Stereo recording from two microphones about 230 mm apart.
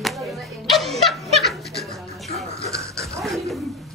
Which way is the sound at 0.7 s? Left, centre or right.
Centre.